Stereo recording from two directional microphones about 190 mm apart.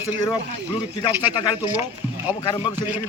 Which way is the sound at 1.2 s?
25° left (ahead or behind).